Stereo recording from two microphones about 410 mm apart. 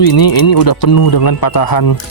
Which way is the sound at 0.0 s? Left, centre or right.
Left.